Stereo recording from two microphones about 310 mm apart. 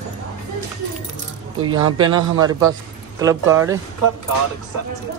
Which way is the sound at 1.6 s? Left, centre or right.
Right.